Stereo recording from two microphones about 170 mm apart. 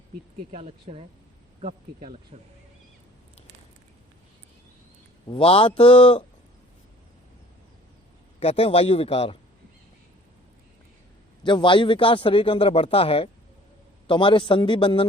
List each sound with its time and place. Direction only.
0.5 s speech: 40° right (ahead or behind)
2.3 s speech: 35° right (ahead or behind)
5.3 s a man's voice: 30° left (ahead or behind)
8.4 s a man's voice: 35° left (ahead or behind)
11.4 s a man's voice: 30° left (ahead or behind)